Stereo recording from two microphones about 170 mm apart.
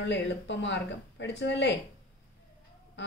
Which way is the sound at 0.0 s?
90° left.